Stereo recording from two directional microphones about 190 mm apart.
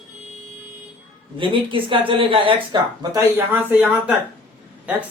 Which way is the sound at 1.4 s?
25° right (ahead or behind).